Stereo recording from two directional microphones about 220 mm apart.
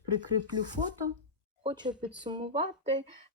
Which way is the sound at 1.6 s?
20° right (ahead or behind).